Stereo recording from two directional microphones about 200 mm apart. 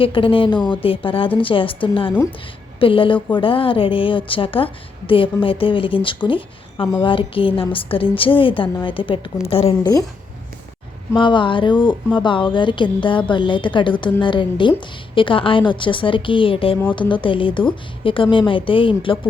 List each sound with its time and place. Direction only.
0.0 s a woman's voice: 25° left (ahead or behind)
11.2 s a woman's voice: 25° left (ahead or behind)